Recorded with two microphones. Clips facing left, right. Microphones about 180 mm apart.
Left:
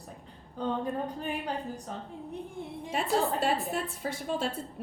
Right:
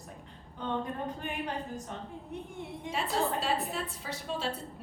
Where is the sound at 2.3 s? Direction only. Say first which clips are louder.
Left 2 dB; 35° left (ahead or behind).